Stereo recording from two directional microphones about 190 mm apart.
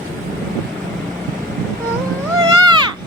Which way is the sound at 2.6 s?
25° right (ahead or behind).